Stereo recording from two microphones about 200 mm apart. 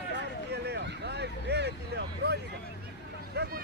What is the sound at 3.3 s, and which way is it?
Vehicle, 55° right (ahead or behind).